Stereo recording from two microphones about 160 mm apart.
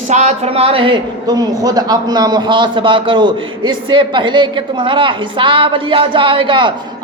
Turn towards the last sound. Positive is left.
turn(degrees=-30)  # may be behind; listen again after turning